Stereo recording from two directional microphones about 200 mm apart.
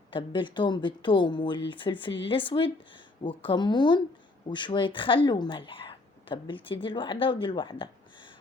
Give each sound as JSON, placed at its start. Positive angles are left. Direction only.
{"t": 0.1, "sound": "speech", "side_deg": 25}